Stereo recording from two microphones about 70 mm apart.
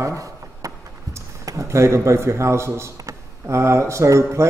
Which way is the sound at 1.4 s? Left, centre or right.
Right.